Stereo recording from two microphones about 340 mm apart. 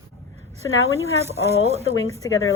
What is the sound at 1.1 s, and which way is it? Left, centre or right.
Speech, centre.